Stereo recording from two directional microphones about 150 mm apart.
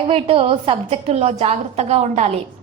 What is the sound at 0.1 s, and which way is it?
A woman's voice, 40° right (ahead or behind).